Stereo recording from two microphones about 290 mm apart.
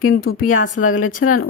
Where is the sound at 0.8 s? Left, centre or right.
Left.